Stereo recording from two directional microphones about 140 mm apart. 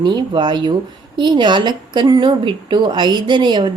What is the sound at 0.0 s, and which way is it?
A woman's voice, 35° right (ahead or behind).